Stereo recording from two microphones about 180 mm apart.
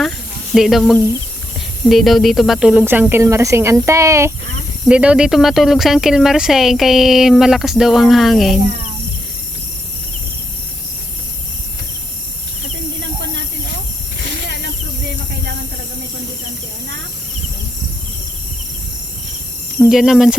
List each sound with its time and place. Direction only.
0.5 s speech: centre (ahead or behind)
14.4 s snake: 70° right (ahead or behind)
19.9 s speech: centre (ahead or behind)